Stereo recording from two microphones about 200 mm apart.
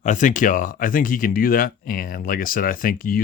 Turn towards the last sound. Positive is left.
turn(degrees=45)  # may be behind; listen again after turning